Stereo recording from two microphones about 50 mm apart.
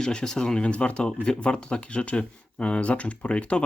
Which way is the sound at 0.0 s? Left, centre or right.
Centre.